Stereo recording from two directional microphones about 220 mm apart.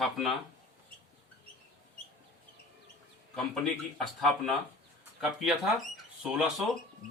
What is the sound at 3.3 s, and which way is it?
Speech, centre (ahead or behind).